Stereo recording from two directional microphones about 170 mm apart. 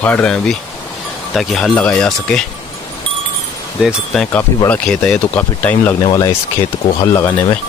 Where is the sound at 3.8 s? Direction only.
5° left (ahead or behind).